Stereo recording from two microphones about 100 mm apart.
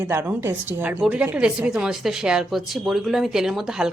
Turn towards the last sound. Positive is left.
turn(degrees=-5)  # may be behind; listen again after turning